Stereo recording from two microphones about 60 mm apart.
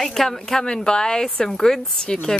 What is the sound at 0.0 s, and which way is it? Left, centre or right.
Speech, centre.